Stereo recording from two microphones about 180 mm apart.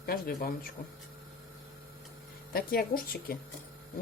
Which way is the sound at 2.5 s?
55° left (ahead or behind).